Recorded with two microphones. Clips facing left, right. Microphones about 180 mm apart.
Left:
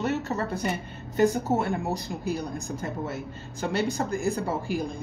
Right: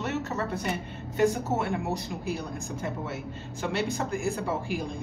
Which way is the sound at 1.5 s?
35° left (ahead or behind).